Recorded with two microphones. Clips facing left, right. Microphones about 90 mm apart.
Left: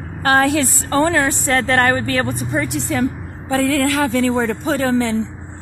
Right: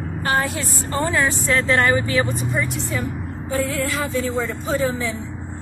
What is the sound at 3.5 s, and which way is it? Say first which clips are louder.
A woman's voice: left 7 dB; 85° left.